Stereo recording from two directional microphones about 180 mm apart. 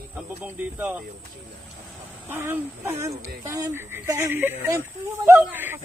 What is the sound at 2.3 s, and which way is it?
Speech, 15° right (ahead or behind).